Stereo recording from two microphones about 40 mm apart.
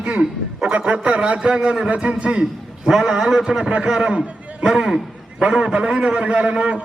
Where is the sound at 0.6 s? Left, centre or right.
Right.